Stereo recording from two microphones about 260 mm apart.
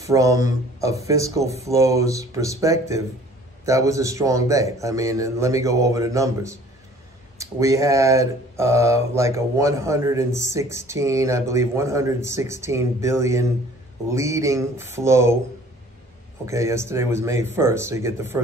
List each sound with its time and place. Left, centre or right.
0.0 s a man's voice: centre
16.4 s a man's voice: centre